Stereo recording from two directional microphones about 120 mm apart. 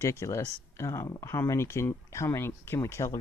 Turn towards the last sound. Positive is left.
turn(degrees=25)  # may be behind; listen again after turning